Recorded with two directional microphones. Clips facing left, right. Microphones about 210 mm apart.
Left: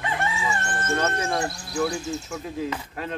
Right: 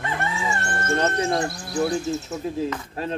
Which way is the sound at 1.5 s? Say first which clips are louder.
Right 3 dB; 50° right (ahead or behind).